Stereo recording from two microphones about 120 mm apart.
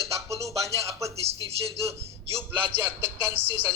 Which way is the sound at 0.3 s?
25° right (ahead or behind).